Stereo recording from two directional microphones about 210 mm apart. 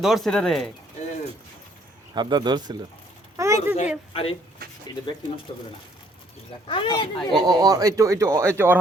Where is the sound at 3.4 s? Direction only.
15° right (ahead or behind).